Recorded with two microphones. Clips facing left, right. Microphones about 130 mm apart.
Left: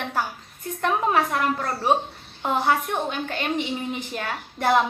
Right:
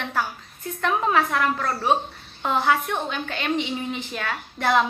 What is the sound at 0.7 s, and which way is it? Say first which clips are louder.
A woman's voice: even; 45° left (ahead or behind).